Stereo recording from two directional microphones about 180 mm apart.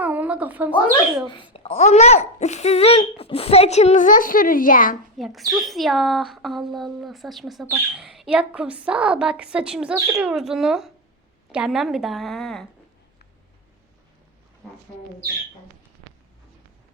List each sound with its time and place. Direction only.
0.0 s a sound: 10° right (ahead or behind)
1.5 s speech: 35° left (ahead or behind); by 4.9 s 50° left (ahead or behind)
5.1 s a woman's voice: centre (ahead or behind)